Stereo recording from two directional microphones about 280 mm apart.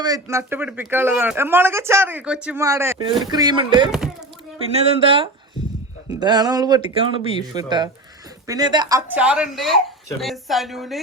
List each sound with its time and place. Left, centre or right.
0.0 s speech: centre